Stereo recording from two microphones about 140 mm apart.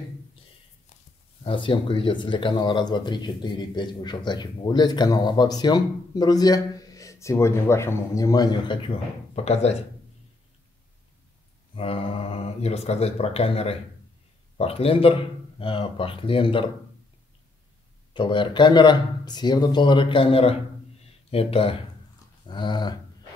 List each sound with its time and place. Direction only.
1.4 s speech: 35° left (ahead or behind)
9.3 s speech: 50° left (ahead or behind)
11.7 s speech: 40° left (ahead or behind)
18.1 s speech: 35° left (ahead or behind)
22.5 s speech: 30° left (ahead or behind)